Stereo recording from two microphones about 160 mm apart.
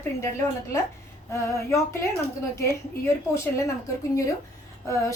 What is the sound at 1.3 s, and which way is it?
Speech, 15° left (ahead or behind).